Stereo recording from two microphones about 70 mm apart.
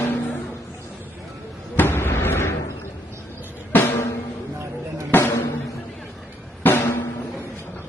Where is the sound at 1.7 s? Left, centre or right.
Left.